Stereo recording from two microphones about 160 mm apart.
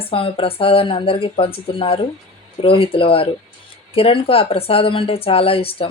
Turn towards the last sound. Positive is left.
turn(degrees=35)  # may be behind; listen again after turning